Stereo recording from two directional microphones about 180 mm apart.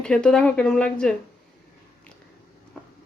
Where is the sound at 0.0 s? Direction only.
5° left (ahead or behind).